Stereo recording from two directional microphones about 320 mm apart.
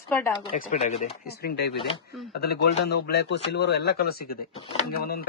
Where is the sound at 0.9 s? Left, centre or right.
Left.